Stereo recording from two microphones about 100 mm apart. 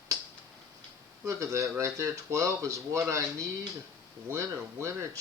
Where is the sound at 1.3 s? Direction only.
30° right (ahead or behind).